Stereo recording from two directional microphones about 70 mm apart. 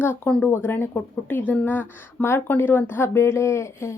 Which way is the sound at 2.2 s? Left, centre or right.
Centre.